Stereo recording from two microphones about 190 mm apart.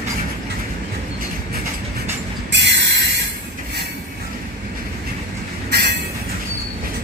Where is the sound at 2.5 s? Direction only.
65° right (ahead or behind).